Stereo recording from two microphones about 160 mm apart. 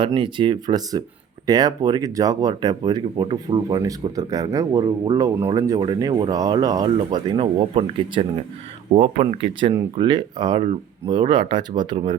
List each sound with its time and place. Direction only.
0.0 s speech: 30° right (ahead or behind)